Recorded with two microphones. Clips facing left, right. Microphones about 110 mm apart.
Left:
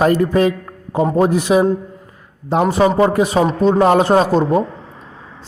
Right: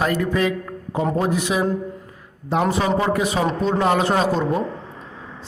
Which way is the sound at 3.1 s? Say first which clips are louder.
Left 5 dB; 35° left (ahead or behind).